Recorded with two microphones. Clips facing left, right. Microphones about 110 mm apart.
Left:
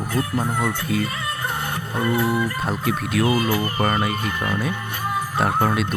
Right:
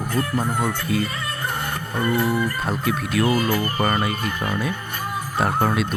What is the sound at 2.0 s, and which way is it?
Speech, 45° right (ahead or behind).